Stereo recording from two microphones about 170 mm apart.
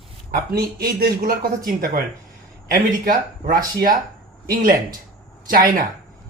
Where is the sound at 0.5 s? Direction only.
60° right (ahead or behind).